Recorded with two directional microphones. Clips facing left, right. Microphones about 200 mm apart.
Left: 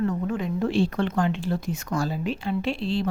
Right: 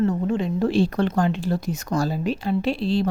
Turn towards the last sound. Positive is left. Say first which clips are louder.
# right 4 dB
turn(degrees=-40)  # may be behind; listen again after turning